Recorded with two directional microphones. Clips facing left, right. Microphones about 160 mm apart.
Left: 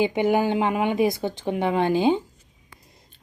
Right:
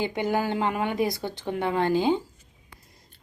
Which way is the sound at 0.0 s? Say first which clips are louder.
Left 5 dB; 20° left (ahead or behind).